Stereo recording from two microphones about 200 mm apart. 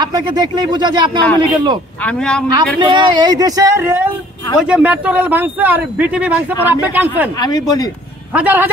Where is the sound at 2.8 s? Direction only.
20° right (ahead or behind).